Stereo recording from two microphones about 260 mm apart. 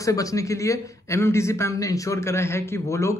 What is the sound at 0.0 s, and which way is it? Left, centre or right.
A man's voice, centre.